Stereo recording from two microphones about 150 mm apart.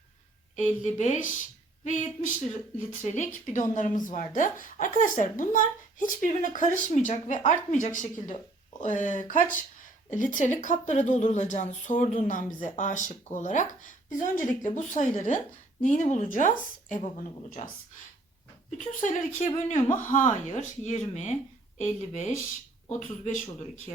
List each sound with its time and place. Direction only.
0.5 s a woman's voice: 55° left (ahead or behind)
18.8 s a woman's voice: 60° left (ahead or behind)
19.5 s speech: 40° left (ahead or behind)
20.0 s speech: 55° left (ahead or behind)
22.4 s speech: 55° left (ahead or behind)